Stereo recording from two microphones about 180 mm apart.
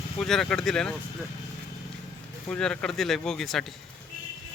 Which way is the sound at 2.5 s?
5° left (ahead or behind).